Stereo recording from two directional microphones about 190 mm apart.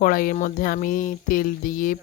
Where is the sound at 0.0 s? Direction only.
45° left (ahead or behind).